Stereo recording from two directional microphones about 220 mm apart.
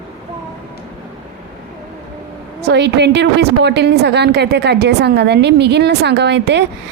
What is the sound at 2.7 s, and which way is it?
A woman's voice, 50° right (ahead or behind).